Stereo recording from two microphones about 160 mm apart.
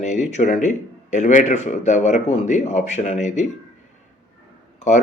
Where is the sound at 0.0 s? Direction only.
45° left (ahead or behind).